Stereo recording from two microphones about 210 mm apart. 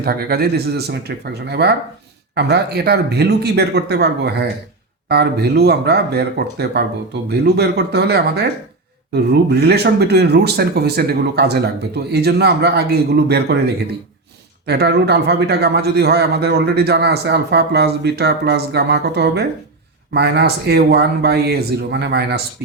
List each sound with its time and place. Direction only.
0.0 s a man's voice: 45° right (ahead or behind)
14.7 s a man's voice: 50° right (ahead or behind)